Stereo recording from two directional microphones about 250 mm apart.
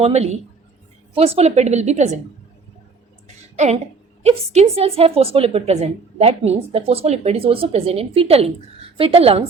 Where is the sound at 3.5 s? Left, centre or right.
Right.